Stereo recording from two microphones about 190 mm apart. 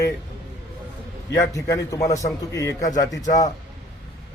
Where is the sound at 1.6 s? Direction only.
15° left (ahead or behind).